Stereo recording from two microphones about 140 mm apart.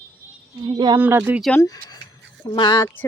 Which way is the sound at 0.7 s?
30° right (ahead or behind).